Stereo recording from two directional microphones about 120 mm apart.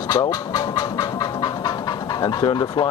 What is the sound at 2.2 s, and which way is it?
Speech, 35° left (ahead or behind).